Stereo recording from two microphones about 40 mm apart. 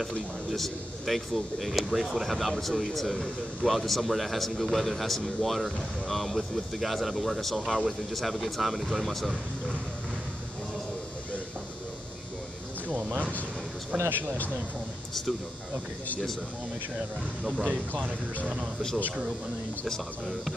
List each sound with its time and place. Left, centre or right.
0.5 s speech: centre
13.9 s speech: right